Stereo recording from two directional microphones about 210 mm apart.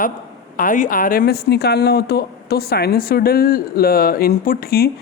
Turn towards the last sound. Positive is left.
turn(degrees=45)  # may be behind; listen again after turning